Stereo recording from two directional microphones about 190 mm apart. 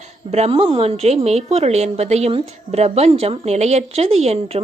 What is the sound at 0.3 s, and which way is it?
A woman's voice, 35° right (ahead or behind).